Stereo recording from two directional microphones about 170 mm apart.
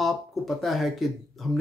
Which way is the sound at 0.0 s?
Centre (ahead or behind).